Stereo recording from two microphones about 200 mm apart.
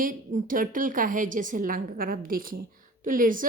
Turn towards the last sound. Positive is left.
turn(degrees=-45)  # may be behind; listen again after turning